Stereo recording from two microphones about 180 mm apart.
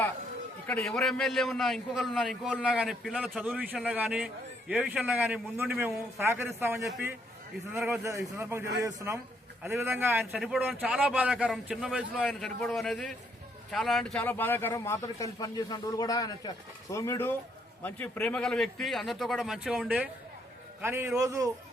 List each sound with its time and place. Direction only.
0.7 s a man's voice: 5° left (ahead or behind); by 21.5 s 20° right (ahead or behind)